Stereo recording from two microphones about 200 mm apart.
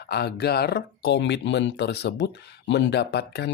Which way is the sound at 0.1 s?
55° left (ahead or behind).